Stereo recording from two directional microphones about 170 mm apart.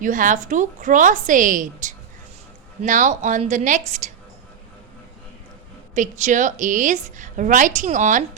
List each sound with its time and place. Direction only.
0.0 s a woman's voice: 50° right (ahead or behind)
5.9 s a woman's voice: 45° right (ahead or behind)